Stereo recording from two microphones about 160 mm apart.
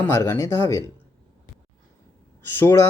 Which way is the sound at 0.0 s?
15° left (ahead or behind).